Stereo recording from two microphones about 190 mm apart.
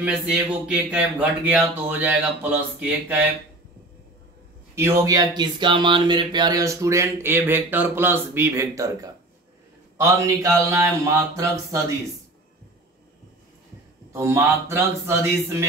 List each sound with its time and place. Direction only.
0.0 s speech: 5° right (ahead or behind)
4.7 s speech: 15° right (ahead or behind)
14.1 s speech: 15° right (ahead or behind)